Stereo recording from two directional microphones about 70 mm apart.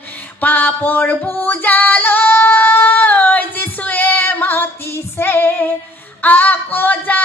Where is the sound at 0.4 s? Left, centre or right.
Left.